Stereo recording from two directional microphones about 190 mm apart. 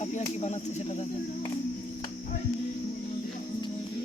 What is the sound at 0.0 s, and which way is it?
Speech, 35° left (ahead or behind).